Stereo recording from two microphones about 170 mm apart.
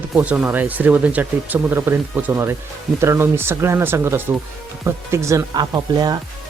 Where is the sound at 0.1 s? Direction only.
5° right (ahead or behind).